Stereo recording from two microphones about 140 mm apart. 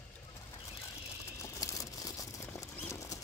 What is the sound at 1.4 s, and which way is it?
Patter, 25° left (ahead or behind).